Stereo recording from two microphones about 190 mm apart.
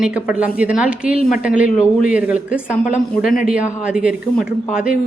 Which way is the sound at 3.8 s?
5° right (ahead or behind).